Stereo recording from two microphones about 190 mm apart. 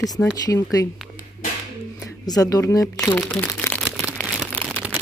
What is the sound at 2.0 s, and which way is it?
Speech, 20° left (ahead or behind).